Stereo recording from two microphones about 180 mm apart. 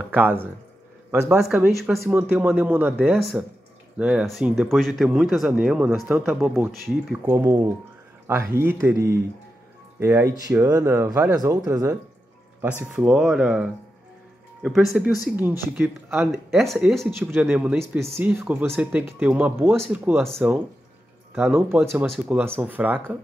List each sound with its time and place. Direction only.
0.0 s a sound: 10° right (ahead or behind)
1.4 s speech: 5° right (ahead or behind)
7.2 s speech: 15° right (ahead or behind)
19.7 s speech: centre (ahead or behind)
21.4 s speech: 10° right (ahead or behind)